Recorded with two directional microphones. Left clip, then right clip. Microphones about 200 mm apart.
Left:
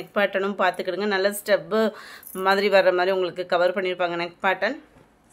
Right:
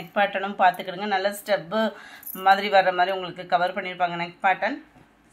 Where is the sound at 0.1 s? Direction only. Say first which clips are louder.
Left 1 dB; 45° left (ahead or behind).